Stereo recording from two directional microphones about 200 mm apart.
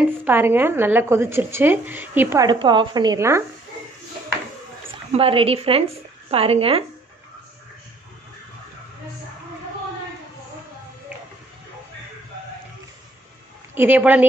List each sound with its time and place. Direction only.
0.2 s a woman's voice: 10° right (ahead or behind)
5.1 s a woman's voice: 30° right (ahead or behind)
13.7 s a woman's voice: 10° right (ahead or behind)